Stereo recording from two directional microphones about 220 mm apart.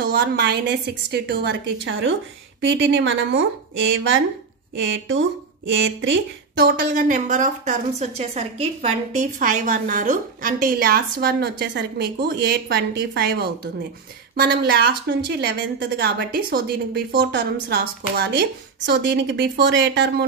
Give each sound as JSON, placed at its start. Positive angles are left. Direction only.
{"t": 0.1, "sound": "a woman's voice", "side_deg": -50}